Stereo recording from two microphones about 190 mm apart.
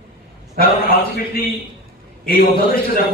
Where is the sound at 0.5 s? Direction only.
50° left (ahead or behind).